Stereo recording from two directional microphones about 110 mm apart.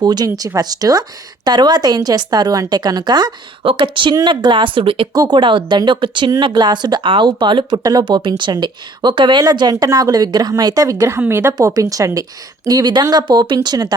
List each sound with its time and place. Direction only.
0.0 s speech: 40° right (ahead or behind); by 5.0 s 55° right (ahead or behind)
5.1 s a woman's voice: 40° right (ahead or behind); by 11.5 s 20° right (ahead or behind)
11.5 s speech: 35° right (ahead or behind)